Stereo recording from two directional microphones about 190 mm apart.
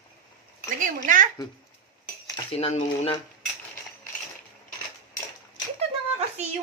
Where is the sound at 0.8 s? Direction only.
45° right (ahead or behind).